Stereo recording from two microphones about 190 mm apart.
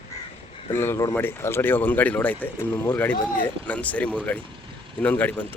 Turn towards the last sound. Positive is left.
turn(degrees=10)  # may be behind; listen again after turning